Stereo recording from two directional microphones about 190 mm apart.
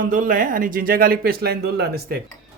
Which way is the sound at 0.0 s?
45° right (ahead or behind).